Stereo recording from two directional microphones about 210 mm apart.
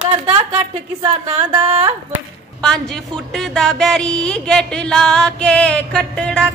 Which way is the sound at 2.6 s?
5° left (ahead or behind).